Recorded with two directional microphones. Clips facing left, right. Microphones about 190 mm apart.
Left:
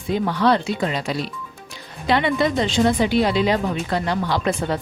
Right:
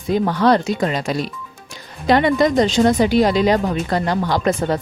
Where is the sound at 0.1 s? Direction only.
45° right (ahead or behind).